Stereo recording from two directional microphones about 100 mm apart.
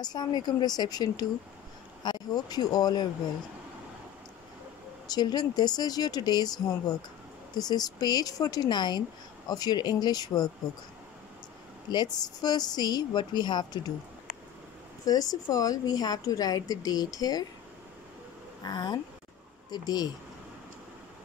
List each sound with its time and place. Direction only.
0.0 s a woman's voice: 45° left (ahead or behind)
5.0 s a woman's voice: 40° left (ahead or behind)
11.9 s a woman's voice: 45° left (ahead or behind)
15.0 s a woman's voice: 40° left (ahead or behind)
18.6 s a woman's voice: 45° left (ahead or behind)